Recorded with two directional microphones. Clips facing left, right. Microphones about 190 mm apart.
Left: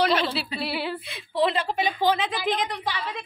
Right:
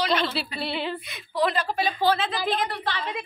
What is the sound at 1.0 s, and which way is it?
A woman's voice, 30° left (ahead or behind).